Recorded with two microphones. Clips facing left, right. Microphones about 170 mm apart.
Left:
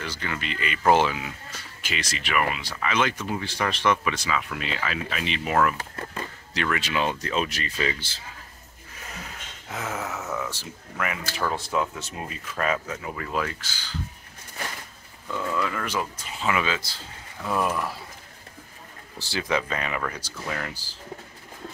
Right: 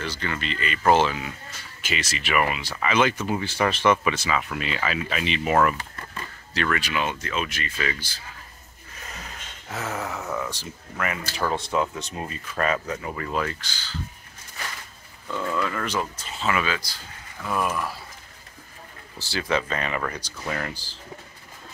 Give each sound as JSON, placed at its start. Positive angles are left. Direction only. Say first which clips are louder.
{"t": 0.0, "sound": "speech", "louder": "right 2 dB", "side_deg": 10}
{"t": 1.8, "sound": "speech", "louder": "right 2 dB", "side_deg": -5}
{"t": 6.1, "sound": "speech", "louder": "right 2 dB", "side_deg": 15}
{"t": 7.7, "sound": "speech", "louder": "left 1 dB", "side_deg": 25}
{"t": 9.1, "sound": "a sound", "louder": "left 1 dB", "side_deg": 10}
{"t": 11.0, "sound": "speech", "louder": "right 1 dB", "side_deg": 5}
{"t": 15.2, "sound": "speech", "louder": "right 1 dB", "side_deg": 5}
{"t": 19.1, "sound": "speech", "louder": "right 1 dB", "side_deg": 20}